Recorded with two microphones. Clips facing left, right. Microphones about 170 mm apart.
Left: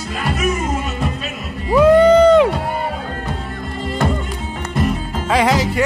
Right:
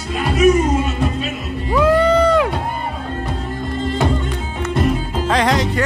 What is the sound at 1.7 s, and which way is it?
Music, 20° left (ahead or behind).